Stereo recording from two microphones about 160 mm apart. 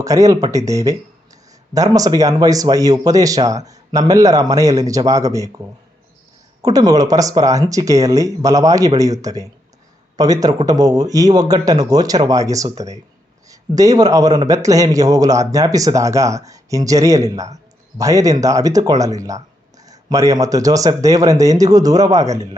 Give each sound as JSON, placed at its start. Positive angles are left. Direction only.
{"t": 0.0, "sound": "a man's voice", "side_deg": -20}